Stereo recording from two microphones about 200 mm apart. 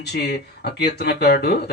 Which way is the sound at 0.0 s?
55° left (ahead or behind).